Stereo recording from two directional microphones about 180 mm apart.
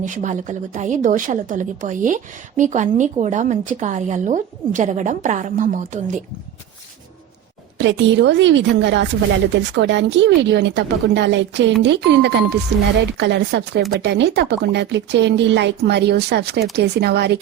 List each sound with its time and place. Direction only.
0.0 s a woman's voice: 45° right (ahead or behind)
7.8 s a woman's voice: 85° right; by 17.3 s 65° right (ahead or behind)